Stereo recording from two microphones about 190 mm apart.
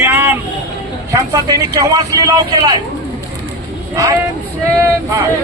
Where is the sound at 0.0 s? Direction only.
10° right (ahead or behind).